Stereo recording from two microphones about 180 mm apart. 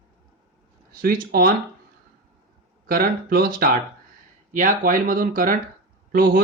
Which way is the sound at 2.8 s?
50° right (ahead or behind).